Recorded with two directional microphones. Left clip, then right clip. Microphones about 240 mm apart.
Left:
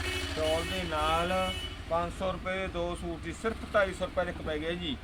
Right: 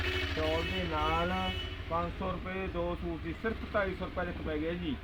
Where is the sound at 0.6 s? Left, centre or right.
Left.